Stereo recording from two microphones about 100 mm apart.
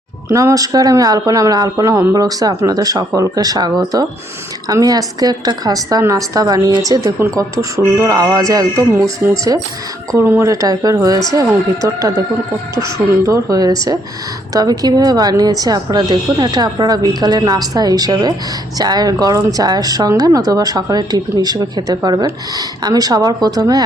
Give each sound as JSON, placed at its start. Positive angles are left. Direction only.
{"t": 0.3, "sound": "speech", "side_deg": -25}
{"t": 0.5, "sound": "speech", "side_deg": -35}
{"t": 10.2, "sound": "speech", "side_deg": -25}
{"t": 10.5, "sound": "speech", "side_deg": -35}